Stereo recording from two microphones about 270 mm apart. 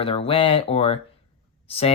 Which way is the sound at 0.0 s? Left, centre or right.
Left.